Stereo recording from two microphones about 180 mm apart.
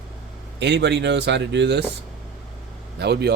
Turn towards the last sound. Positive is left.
turn(degrees=-65)  # may be behind; listen again after turning